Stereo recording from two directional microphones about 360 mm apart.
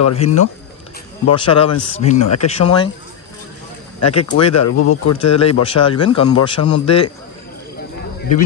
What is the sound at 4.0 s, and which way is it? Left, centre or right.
A man's voice, left.